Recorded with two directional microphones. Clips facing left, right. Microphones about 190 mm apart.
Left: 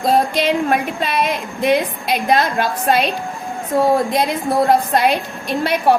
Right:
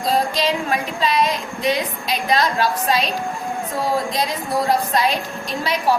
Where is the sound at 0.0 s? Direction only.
55° left (ahead or behind).